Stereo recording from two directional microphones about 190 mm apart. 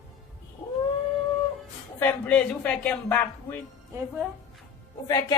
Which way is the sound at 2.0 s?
10° left (ahead or behind).